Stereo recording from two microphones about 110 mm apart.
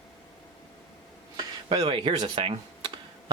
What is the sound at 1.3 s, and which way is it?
Computer keyboard, 55° right (ahead or behind).